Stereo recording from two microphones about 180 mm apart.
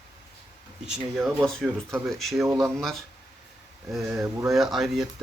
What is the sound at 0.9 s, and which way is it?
Speech, centre (ahead or behind).